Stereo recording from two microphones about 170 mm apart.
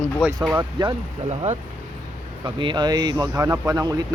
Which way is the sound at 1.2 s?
40° right (ahead or behind).